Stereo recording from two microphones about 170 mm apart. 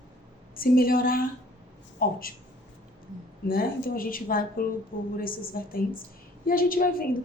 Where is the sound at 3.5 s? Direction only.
60° left (ahead or behind).